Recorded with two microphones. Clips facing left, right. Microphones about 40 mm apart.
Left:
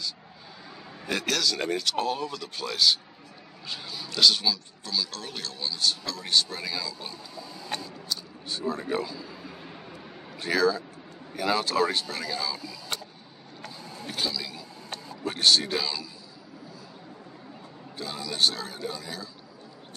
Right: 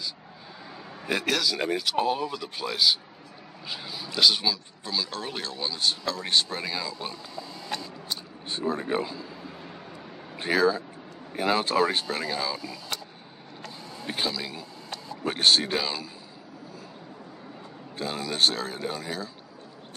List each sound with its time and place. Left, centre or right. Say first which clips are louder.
1.0 s speech: right 1 dB; centre
10.3 s speech: right 1 dB; right
14.0 s speech: right 2 dB; right
17.9 s speech: right 3 dB; right